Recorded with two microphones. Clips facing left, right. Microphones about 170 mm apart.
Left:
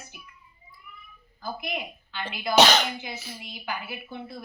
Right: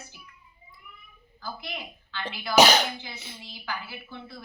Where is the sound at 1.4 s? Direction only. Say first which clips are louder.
Left 5 dB; 15° left (ahead or behind).